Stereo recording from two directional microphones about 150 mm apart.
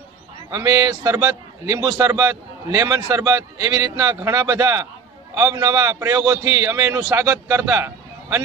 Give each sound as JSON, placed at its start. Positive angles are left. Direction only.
{"t": 0.5, "sound": "a man's voice", "side_deg": -25}